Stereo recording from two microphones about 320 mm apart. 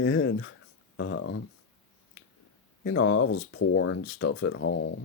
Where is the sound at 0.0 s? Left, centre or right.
Left.